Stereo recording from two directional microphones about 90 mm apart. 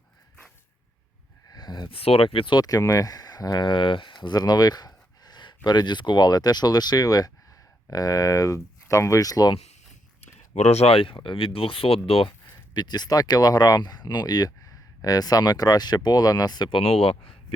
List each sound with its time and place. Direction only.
1.5 s a sound: 50° left (ahead or behind)
1.9 s speech: 90° left; by 2.6 s 75° left (ahead or behind)
2.6 s speech: 45° left (ahead or behind)
10.8 s speech: 80° left
12.7 s speech: 50° left (ahead or behind)
16.6 s speech: 85° left